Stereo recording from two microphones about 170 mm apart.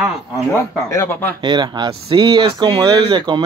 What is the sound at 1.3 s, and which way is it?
Speech, 25° right (ahead or behind).